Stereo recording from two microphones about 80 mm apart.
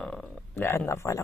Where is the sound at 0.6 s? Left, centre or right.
Left.